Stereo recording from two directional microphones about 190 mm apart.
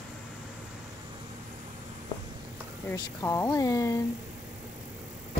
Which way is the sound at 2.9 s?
15° left (ahead or behind).